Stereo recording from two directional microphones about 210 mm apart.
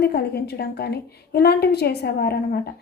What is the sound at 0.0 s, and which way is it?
A woman's voice, 50° left (ahead or behind).